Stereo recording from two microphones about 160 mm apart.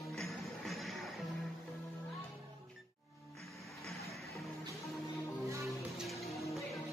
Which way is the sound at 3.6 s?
Centre (ahead or behind).